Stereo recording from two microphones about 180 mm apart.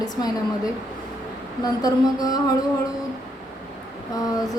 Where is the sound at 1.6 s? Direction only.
20° left (ahead or behind).